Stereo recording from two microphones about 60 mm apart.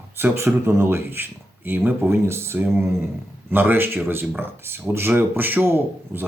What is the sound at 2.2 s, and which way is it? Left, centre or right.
Speech, right.